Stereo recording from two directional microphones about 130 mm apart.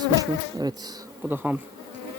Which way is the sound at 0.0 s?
30° right (ahead or behind).